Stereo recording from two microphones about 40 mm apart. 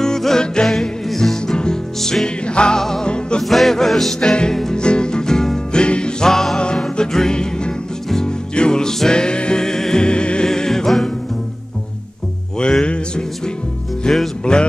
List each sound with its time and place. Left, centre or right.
0.0 s music: centre
2.2 s music: left
2.8 s music: centre
3.1 s music: left
3.4 s music: centre
4.2 s music: left
5.7 s music: left
6.3 s music: centre
6.6 s music: left
12.8 s music: left